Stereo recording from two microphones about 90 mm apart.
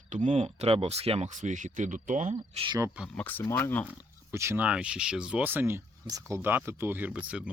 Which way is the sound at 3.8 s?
30° right (ahead or behind).